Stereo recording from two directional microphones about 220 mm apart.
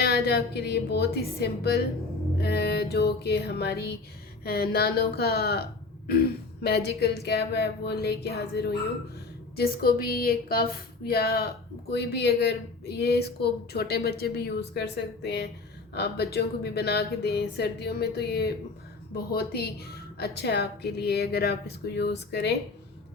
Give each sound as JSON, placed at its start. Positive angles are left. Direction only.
{"t": 0.0, "sound": "speech", "side_deg": 50}